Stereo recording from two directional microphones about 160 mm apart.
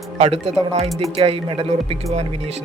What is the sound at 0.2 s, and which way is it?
Speech, 40° right (ahead or behind).